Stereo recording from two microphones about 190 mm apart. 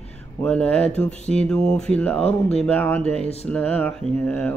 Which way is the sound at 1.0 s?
5° left (ahead or behind).